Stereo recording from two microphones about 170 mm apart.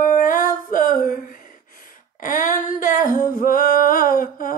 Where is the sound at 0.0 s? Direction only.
50° left (ahead or behind).